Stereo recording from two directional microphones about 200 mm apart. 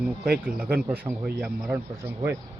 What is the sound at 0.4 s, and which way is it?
Speech, 5° right (ahead or behind).